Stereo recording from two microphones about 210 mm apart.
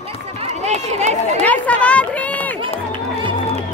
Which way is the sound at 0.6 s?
30° right (ahead or behind).